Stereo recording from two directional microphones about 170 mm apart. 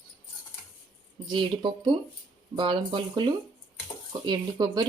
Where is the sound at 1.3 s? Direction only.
30° right (ahead or behind).